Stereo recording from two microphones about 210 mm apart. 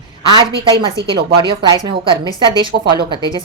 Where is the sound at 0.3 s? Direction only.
20° right (ahead or behind).